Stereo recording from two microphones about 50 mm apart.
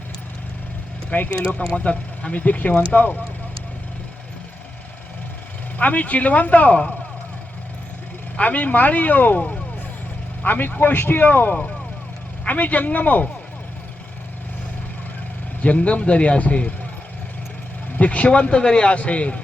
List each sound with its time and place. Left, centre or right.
1.1 s speech: left
5.7 s speech: left
8.4 s speech: left
15.6 s speech: left
17.9 s speech: left